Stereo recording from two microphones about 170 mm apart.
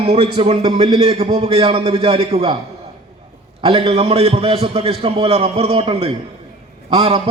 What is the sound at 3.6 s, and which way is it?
A man's voice, 35° right (ahead or behind).